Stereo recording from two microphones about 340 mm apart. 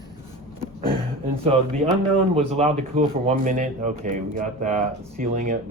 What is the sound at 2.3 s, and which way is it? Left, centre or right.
Speech, centre.